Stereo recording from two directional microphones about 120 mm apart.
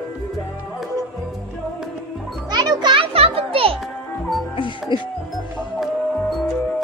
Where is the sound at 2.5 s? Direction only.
35° right (ahead or behind); by 3.7 s 50° right (ahead or behind).